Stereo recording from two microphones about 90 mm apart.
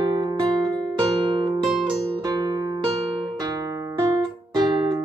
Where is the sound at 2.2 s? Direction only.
45° right (ahead or behind).